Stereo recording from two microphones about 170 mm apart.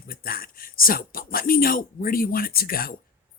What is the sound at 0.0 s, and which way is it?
Speech, 60° left (ahead or behind).